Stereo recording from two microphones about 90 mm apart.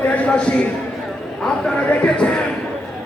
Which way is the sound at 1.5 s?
10° left (ahead or behind).